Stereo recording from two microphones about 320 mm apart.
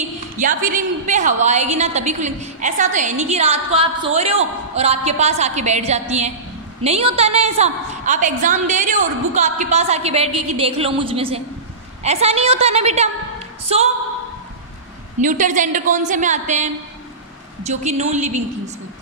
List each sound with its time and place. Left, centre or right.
0.4 s a woman's voice: right
15.1 s a woman's voice: right